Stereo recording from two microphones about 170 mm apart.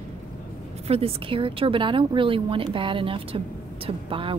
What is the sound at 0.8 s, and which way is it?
Speech, 35° right (ahead or behind).